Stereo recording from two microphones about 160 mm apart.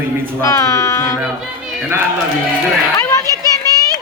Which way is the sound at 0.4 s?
20° left (ahead or behind).